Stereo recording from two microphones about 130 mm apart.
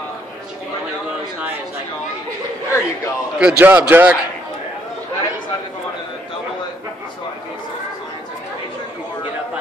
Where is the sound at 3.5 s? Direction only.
15° right (ahead or behind).